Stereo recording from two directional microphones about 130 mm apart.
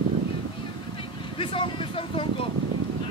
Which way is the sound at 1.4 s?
40° left (ahead or behind).